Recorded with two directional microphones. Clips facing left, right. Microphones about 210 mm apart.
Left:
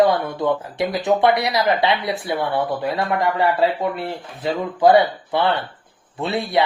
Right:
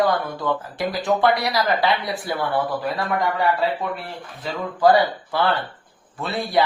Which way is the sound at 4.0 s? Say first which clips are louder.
Left 6 dB; 30° left (ahead or behind).